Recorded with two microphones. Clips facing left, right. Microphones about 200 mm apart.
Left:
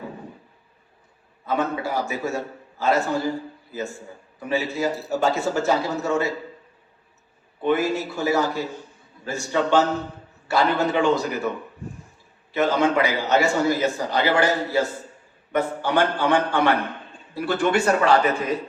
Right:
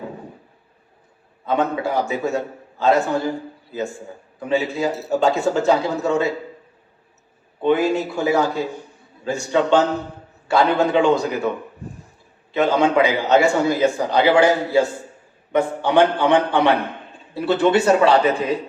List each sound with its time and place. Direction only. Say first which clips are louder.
1.5 s a man's voice: right 4 dB; 20° right (ahead or behind)
7.6 s a man's voice: right 4 dB; 15° right (ahead or behind)
12.5 s a man's voice: right 3 dB; 15° right (ahead or behind)